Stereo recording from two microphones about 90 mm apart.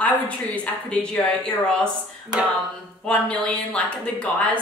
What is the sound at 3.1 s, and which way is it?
A woman's voice, 10° left (ahead or behind).